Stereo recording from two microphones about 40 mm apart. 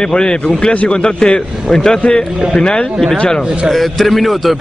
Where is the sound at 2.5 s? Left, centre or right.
Left.